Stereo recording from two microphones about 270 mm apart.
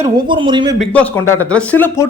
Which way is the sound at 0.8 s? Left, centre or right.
Centre.